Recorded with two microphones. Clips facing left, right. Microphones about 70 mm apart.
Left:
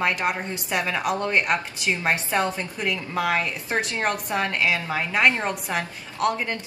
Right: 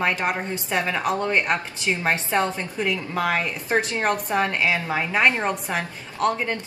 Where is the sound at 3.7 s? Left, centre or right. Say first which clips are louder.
Right 5 dB; right.